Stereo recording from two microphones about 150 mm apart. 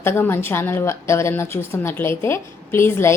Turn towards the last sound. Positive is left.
turn(degrees=15)  # may be behind; listen again after turning